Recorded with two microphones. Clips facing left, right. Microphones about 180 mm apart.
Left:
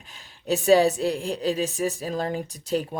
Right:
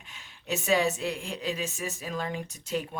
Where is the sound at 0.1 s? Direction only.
35° left (ahead or behind).